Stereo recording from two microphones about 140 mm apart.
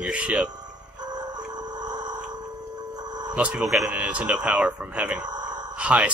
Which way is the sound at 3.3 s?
10° right (ahead or behind).